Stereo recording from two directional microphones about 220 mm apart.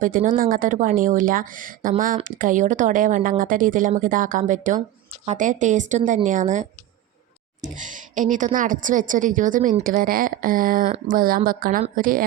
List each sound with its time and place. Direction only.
0.0 s a woman's voice: 40° right (ahead or behind)